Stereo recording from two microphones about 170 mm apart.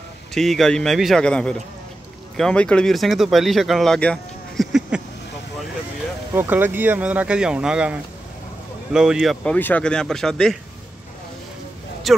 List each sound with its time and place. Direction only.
0.3 s speech: centre (ahead or behind)
6.3 s speech: 10° right (ahead or behind)
12.1 s speech: centre (ahead or behind)